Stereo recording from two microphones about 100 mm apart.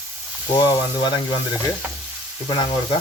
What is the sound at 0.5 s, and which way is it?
Speech, 45° left (ahead or behind).